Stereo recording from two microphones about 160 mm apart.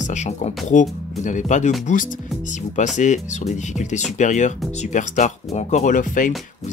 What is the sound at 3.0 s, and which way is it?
Speech, 50° left (ahead or behind).